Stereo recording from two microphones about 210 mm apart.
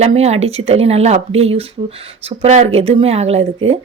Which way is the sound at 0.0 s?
30° right (ahead or behind).